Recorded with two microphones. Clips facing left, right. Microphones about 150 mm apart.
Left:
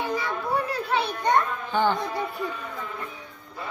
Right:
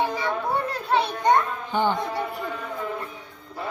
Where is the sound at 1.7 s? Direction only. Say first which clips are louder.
Even; 15° right (ahead or behind).